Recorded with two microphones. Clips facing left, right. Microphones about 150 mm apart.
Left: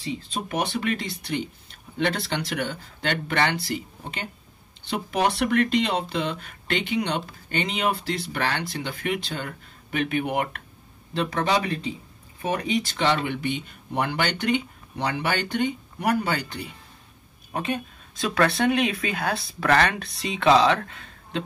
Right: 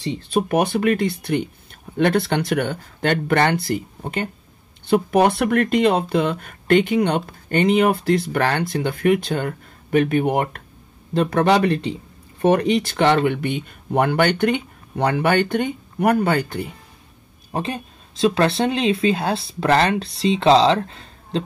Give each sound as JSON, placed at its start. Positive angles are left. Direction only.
{"t": 0.0, "sound": "speech", "side_deg": -60}
{"t": 11.1, "sound": "speech", "side_deg": -55}
{"t": 17.5, "sound": "speech", "side_deg": -30}